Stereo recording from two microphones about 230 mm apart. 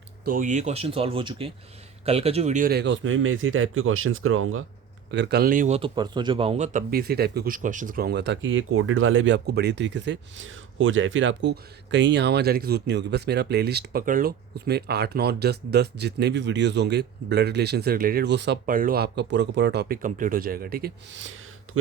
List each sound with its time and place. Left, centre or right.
0.3 s speech: right
5.1 s a man's voice: right